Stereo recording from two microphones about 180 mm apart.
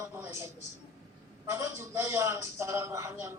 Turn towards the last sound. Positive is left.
turn(degrees=-15)  # may be behind; listen again after turning